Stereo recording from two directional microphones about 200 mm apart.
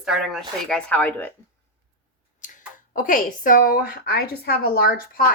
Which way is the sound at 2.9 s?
45° left (ahead or behind).